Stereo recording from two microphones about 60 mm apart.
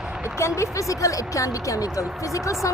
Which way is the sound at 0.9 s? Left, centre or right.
Left.